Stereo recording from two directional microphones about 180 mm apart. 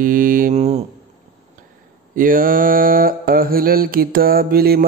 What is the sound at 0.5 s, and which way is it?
Speech, 35° right (ahead or behind).